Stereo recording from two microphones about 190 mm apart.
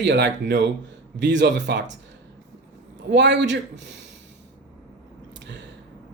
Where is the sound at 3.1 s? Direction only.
65° right (ahead or behind).